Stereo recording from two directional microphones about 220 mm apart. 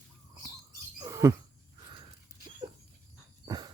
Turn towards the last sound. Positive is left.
turn(degrees=-20)  # may be behind; listen again after turning